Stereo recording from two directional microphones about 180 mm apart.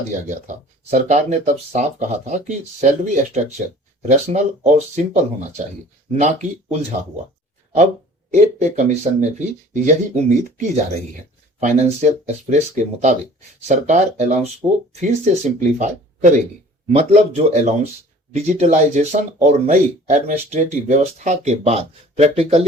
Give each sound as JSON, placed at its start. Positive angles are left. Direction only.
{"t": 0.3, "sound": "speech", "side_deg": -45}
{"t": 8.3, "sound": "speech", "side_deg": -40}